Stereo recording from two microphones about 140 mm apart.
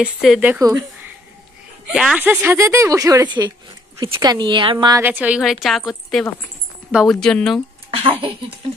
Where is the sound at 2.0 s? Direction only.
5° right (ahead or behind); by 4.9 s 35° right (ahead or behind).